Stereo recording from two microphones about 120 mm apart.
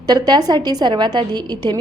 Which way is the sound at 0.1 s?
35° right (ahead or behind).